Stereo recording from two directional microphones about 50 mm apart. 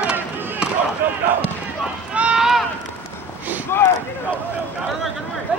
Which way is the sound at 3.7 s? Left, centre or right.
Left.